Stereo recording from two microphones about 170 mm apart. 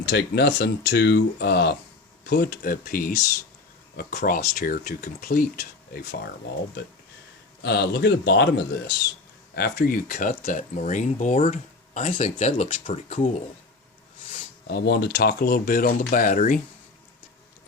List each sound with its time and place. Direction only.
0.0 s speech: 80° left; by 6.1 s 65° left (ahead or behind)
7.6 s speech: 75° left (ahead or behind)
9.6 s speech: 65° left (ahead or behind); by 13.3 s 45° left (ahead or behind)
14.7 s speech: 70° left (ahead or behind); by 16.6 s 50° left (ahead or behind)